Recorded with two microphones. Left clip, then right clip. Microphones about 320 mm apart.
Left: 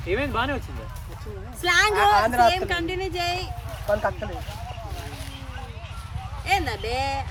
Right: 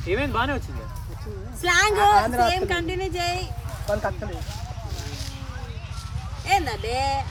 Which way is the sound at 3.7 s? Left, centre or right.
Left.